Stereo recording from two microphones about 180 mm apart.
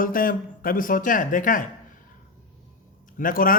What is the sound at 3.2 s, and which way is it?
Speech, 50° left (ahead or behind).